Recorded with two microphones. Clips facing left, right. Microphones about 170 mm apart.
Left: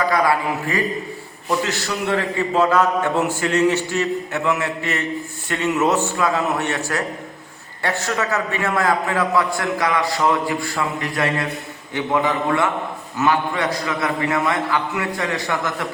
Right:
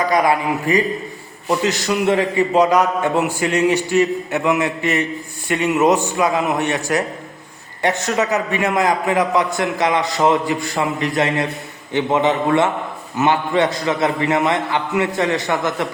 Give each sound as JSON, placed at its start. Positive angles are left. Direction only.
{"t": 0.1, "sound": "a man's voice", "side_deg": -20}